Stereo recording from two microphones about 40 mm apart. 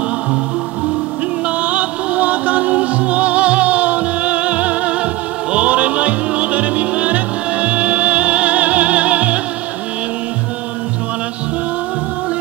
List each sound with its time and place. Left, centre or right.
1.6 s music: right